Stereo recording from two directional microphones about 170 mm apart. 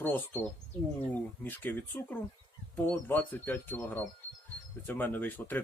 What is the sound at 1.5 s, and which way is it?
Speech, 10° left (ahead or behind).